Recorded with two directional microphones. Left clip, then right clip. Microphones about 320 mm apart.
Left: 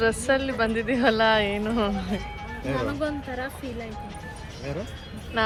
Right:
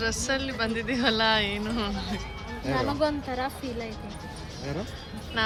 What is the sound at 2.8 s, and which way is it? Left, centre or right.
Speech, centre.